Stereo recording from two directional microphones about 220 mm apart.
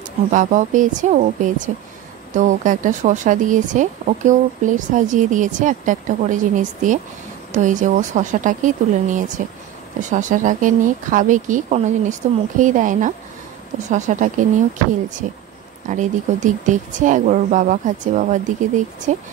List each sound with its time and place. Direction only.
0.3 s speech: 35° right (ahead or behind)